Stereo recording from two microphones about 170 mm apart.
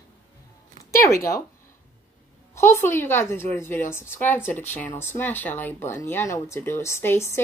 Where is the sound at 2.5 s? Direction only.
15° left (ahead or behind).